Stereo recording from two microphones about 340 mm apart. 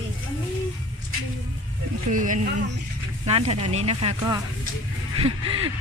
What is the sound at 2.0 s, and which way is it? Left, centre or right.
Speech, right.